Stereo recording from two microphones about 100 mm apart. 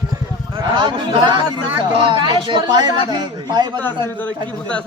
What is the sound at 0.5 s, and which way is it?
A man's voice, 50° right (ahead or behind).